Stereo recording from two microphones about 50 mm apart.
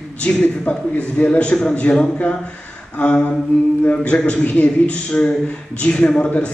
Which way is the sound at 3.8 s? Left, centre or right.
Left.